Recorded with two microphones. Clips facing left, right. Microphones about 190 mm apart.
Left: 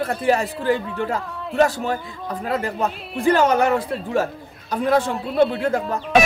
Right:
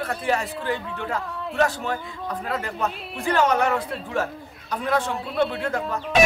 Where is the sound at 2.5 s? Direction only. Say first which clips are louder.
Left 5 dB; 35° left (ahead or behind).